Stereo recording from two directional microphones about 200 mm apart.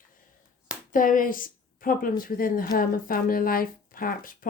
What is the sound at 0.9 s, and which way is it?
A woman's voice, 40° left (ahead or behind).